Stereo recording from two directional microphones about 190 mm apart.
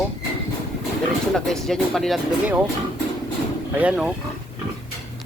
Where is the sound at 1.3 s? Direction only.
Centre (ahead or behind).